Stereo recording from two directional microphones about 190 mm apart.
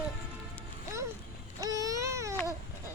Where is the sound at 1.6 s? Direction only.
20° right (ahead or behind).